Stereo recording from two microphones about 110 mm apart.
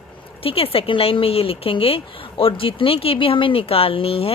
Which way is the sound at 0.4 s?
60° left (ahead or behind).